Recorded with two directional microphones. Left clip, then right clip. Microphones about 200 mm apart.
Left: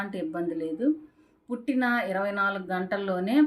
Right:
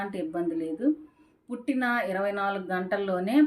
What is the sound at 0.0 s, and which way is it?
Speech, 5° left (ahead or behind).